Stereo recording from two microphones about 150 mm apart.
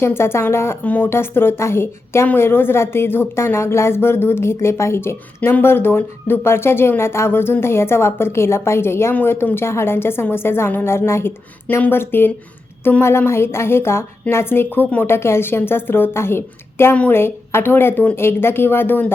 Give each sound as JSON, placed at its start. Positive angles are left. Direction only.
{"t": 0.0, "sound": "a woman's voice", "side_deg": 15}